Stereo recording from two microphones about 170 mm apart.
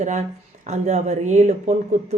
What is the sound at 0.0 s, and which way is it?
A woman's voice, 45° right (ahead or behind).